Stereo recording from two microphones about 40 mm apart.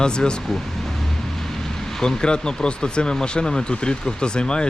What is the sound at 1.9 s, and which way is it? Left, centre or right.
Speech, left.